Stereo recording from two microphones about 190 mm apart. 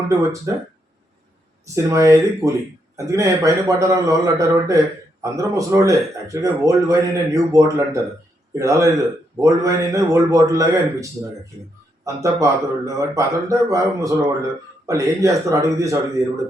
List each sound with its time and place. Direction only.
0.1 s speech: 15° right (ahead or behind)
1.6 s speech: 15° right (ahead or behind)